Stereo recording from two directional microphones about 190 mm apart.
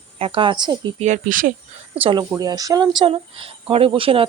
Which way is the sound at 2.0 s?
25° right (ahead or behind).